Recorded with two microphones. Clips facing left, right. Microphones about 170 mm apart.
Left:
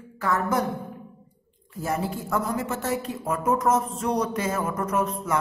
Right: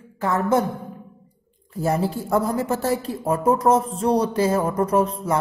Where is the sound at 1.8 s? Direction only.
35° right (ahead or behind).